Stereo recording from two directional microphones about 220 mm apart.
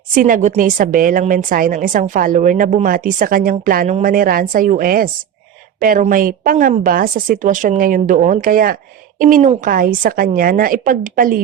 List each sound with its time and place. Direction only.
0.1 s speech: 40° right (ahead or behind)